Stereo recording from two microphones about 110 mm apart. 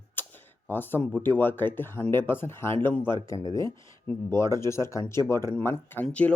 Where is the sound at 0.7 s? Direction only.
20° left (ahead or behind).